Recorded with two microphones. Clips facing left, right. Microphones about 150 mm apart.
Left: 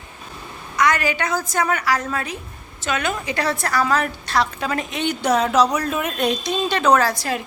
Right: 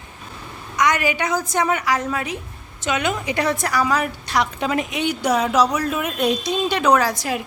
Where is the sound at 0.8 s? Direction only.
20° right (ahead or behind).